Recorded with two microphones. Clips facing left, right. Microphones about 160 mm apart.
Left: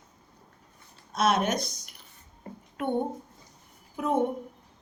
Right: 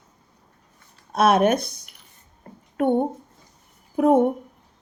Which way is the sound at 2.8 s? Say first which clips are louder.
Right 8 dB; 50° right (ahead or behind).